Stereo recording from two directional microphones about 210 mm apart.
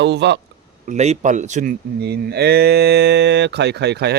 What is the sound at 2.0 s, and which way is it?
Speech, 50° right (ahead or behind).